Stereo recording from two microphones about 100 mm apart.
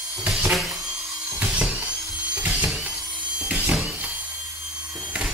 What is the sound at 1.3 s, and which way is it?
Dental drill, 10° right (ahead or behind).